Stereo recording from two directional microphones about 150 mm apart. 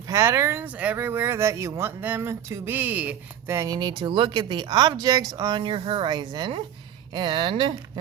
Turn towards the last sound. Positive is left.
turn(degrees=-30)  # may be behind; listen again after turning